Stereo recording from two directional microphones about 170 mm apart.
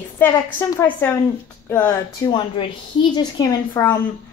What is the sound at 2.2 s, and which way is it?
A woman's voice, 30° left (ahead or behind).